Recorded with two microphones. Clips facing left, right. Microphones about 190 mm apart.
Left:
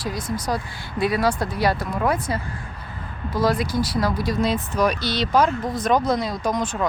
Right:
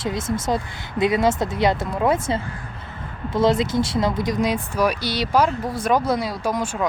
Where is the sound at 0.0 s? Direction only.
25° right (ahead or behind).